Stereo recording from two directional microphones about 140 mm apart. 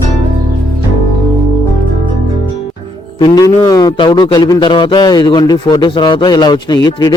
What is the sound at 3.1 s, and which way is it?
A man's voice, 30° left (ahead or behind).